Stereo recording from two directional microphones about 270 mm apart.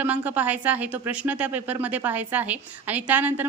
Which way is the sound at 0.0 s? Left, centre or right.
Centre.